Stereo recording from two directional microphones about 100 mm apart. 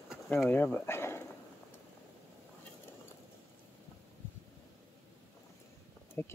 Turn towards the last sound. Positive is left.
turn(degrees=25)  # may be behind; listen again after turning